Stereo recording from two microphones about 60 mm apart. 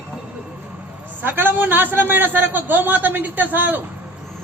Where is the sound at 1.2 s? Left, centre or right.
Right.